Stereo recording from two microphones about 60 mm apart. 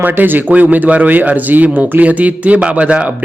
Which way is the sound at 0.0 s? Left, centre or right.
Right.